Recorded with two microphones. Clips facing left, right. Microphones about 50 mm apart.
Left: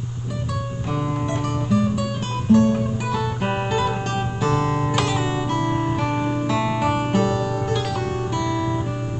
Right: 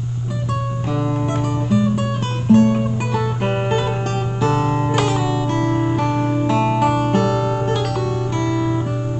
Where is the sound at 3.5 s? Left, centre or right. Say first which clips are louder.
Right 1 dB; right.